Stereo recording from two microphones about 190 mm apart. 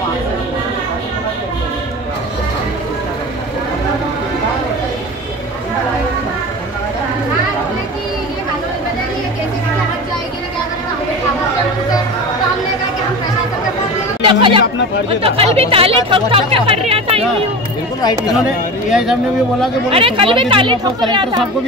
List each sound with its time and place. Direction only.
14.2 s speech: 25° right (ahead or behind)
18.0 s speech: 20° left (ahead or behind)
18.9 s speech: 5° right (ahead or behind)
19.9 s speech: 30° right (ahead or behind)